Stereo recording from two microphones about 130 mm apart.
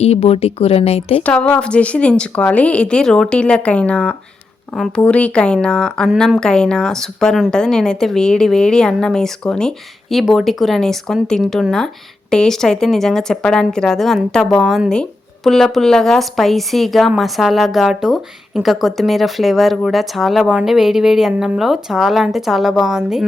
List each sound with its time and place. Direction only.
0.0 s speech: 55° left (ahead or behind)
1.2 s a woman's voice: 10° left (ahead or behind)